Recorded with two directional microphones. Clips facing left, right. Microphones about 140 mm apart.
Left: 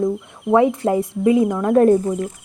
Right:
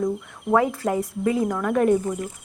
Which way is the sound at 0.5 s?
20° left (ahead or behind).